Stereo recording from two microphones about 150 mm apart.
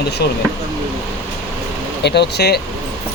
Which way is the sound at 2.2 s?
90° left.